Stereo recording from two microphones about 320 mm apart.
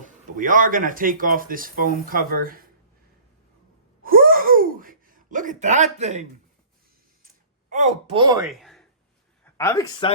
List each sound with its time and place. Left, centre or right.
0.0 s speech: right
4.0 s gasp: right
7.7 s speech: centre
8.4 s a sound: centre
9.4 s speech: centre